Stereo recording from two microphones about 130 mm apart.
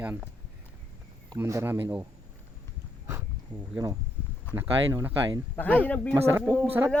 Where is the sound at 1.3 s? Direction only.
20° right (ahead or behind).